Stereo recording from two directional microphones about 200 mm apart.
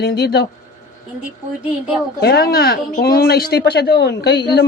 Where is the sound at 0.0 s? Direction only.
55° left (ahead or behind).